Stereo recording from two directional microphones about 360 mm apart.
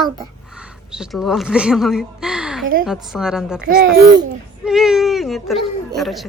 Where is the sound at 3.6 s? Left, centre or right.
Right.